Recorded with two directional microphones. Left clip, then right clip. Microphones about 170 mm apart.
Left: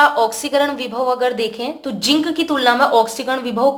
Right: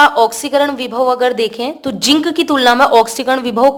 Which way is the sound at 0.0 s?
35° right (ahead or behind).